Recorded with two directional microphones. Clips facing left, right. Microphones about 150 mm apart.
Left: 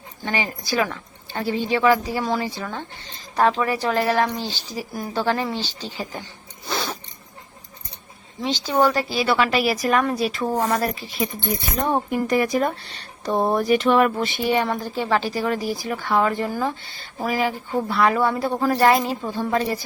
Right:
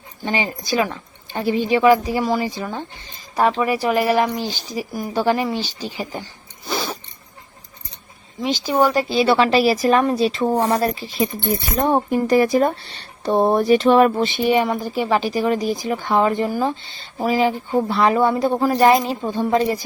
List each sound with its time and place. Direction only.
0.3 s speech: 20° right (ahead or behind)
6.7 s a sound: 5° right (ahead or behind)
8.4 s speech: 10° right (ahead or behind)